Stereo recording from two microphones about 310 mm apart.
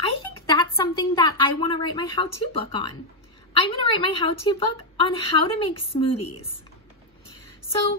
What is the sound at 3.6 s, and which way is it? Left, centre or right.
A woman's voice, centre.